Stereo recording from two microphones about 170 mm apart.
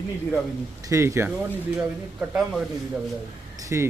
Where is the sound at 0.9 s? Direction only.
15° right (ahead or behind).